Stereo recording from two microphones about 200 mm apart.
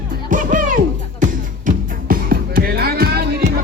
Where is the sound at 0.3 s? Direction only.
40° right (ahead or behind).